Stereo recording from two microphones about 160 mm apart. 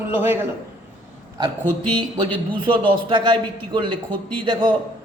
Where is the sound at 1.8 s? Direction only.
30° right (ahead or behind).